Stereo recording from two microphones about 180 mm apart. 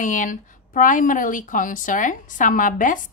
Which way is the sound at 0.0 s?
45° left (ahead or behind).